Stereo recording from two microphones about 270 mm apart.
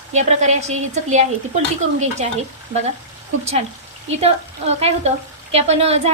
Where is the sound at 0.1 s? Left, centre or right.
Right.